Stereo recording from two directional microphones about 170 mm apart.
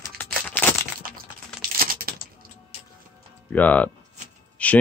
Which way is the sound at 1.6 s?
60° right (ahead or behind).